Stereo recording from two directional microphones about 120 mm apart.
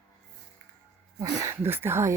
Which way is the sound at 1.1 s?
25° right (ahead or behind).